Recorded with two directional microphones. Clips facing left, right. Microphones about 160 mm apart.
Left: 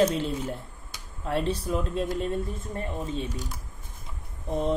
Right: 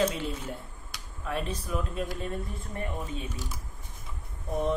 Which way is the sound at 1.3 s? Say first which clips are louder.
Left 5 dB; 30° left (ahead or behind).